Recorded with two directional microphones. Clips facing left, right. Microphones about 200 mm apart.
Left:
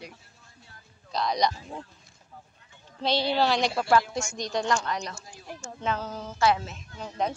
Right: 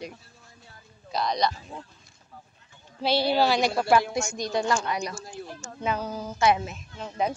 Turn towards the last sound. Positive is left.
turn(degrees=0)  # may be behind; listen again after turning